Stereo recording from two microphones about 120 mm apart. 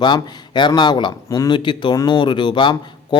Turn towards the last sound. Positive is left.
turn(degrees=40)  # may be behind; listen again after turning